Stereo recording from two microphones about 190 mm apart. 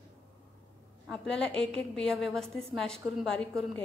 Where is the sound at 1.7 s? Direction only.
5° left (ahead or behind).